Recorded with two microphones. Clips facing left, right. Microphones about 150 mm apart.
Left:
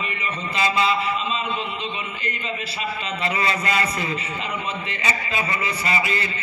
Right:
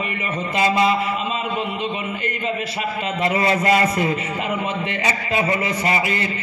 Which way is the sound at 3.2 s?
50° right (ahead or behind).